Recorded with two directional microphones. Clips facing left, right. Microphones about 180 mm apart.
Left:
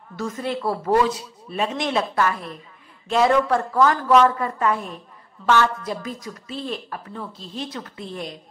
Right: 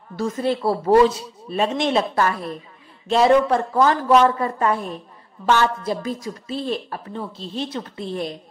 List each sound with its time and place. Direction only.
0.1 s speech: 30° right (ahead or behind)